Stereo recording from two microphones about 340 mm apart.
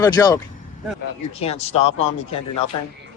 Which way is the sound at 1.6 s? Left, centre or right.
Centre.